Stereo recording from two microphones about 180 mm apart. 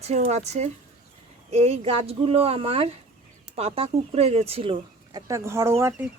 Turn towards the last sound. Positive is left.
turn(degrees=-15)  # may be behind; listen again after turning